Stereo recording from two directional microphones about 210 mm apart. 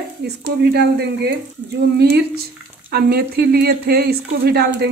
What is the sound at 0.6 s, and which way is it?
Speech, 50° right (ahead or behind).